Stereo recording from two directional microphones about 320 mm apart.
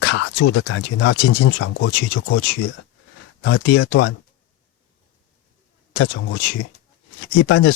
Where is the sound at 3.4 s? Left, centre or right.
Left.